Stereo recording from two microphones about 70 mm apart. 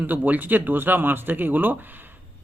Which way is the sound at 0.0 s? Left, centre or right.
Right.